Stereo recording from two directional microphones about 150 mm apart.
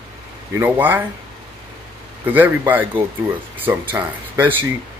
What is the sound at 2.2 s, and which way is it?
A man's voice, 10° right (ahead or behind).